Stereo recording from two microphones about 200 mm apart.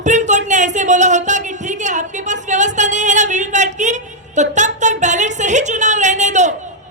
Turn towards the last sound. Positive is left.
turn(degrees=-35)  # may be behind; listen again after turning